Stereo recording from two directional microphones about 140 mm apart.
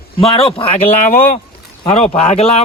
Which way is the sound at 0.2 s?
45° left (ahead or behind).